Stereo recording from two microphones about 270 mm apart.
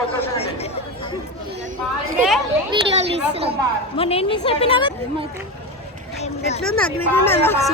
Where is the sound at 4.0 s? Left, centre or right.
Left.